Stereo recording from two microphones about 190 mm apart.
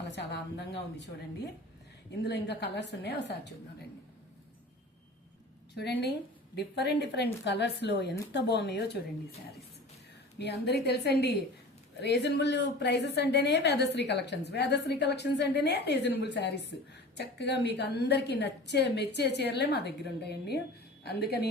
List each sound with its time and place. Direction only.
0.0 s a woman's voice: 65° left (ahead or behind)
2.2 s a woman's voice: 60° left (ahead or behind)
5.7 s a woman's voice: 60° left (ahead or behind)
10.3 s a woman's voice: 60° left (ahead or behind)